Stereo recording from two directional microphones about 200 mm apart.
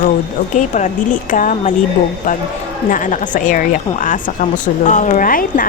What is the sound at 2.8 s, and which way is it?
Speech, 40° left (ahead or behind).